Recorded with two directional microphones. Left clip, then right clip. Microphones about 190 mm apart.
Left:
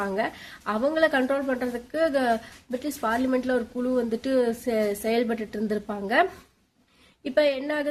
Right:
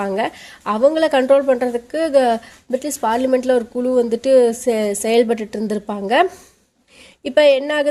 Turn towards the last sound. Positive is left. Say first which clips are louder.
# right 10 dB
turn(degrees=-40)  # may be behind; listen again after turning